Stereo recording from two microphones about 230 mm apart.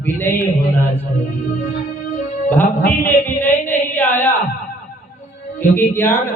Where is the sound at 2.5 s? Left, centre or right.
Centre.